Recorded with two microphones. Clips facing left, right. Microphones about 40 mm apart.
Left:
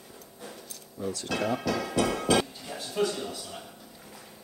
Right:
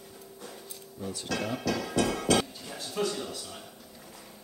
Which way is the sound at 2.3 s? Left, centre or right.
Centre.